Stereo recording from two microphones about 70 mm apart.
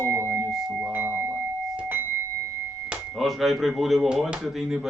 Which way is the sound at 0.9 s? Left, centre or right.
Right.